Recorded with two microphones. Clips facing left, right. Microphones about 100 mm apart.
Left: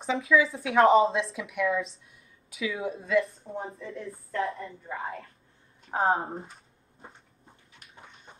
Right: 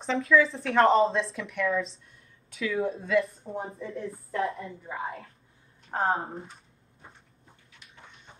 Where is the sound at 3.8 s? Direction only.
30° right (ahead or behind).